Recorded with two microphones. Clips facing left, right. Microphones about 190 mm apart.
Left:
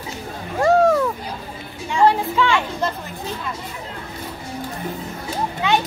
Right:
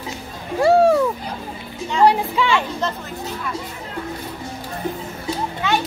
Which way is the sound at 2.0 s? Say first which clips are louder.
Even; 15° right (ahead or behind).